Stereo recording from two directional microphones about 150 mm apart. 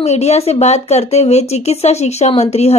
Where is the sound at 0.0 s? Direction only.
45° left (ahead or behind).